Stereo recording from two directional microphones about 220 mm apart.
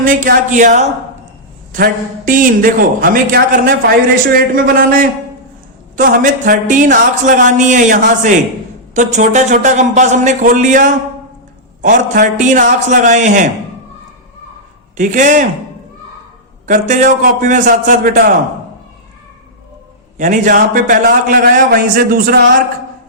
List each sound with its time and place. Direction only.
0.0 s a man's voice: 40° right (ahead or behind)
14.9 s a man's voice: 35° right (ahead or behind)
16.6 s a man's voice: 35° right (ahead or behind)
20.1 s a man's voice: 35° right (ahead or behind)